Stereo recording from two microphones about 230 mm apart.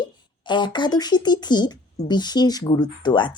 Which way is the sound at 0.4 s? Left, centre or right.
Centre.